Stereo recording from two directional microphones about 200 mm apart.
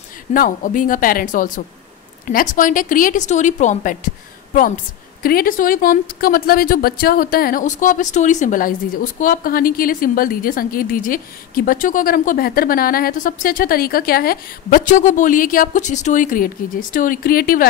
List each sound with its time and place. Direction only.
0.3 s a woman's voice: 40° left (ahead or behind)
5.2 s speech: 45° left (ahead or behind)